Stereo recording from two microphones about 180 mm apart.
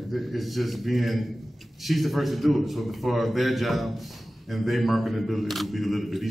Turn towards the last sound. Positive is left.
turn(degrees=0)  # may be behind; listen again after turning